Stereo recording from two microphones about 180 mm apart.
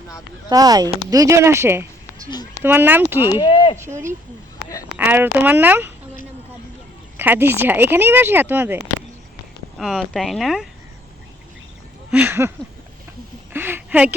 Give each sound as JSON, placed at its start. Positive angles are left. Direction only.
{"t": 0.5, "sound": "speech", "side_deg": -20}
{"t": 2.3, "sound": "speech", "side_deg": 20}
{"t": 2.6, "sound": "speech", "side_deg": -10}
{"t": 3.4, "sound": "speech", "side_deg": 25}
{"t": 3.8, "sound": "speech", "side_deg": -15}
{"t": 7.2, "sound": "speech", "side_deg": -10}
{"t": 12.1, "sound": "speech", "side_deg": -10}
{"t": 13.5, "sound": "a sound", "side_deg": -10}